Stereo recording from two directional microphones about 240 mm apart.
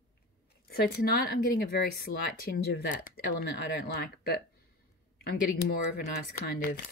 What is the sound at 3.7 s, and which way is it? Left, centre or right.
Speech, left.